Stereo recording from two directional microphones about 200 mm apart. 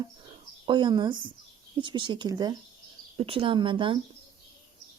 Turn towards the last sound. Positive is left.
turn(degrees=-25)  # may be behind; listen again after turning